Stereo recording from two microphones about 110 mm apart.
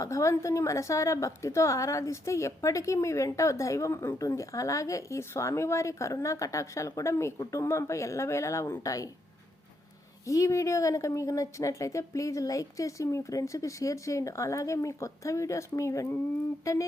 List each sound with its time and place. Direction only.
0.0 s a woman's voice: 25° left (ahead or behind)
10.2 s a woman's voice: 30° left (ahead or behind)